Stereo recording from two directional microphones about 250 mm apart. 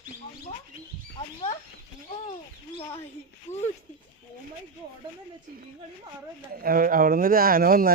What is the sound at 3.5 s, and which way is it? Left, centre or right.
Speech, left.